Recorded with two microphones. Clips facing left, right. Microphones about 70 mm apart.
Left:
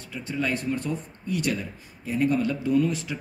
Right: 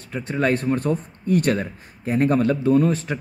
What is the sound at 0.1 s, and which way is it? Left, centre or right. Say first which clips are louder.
Speech: right 7 dB; right.